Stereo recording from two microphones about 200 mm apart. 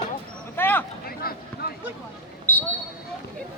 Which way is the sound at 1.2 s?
50° left (ahead or behind).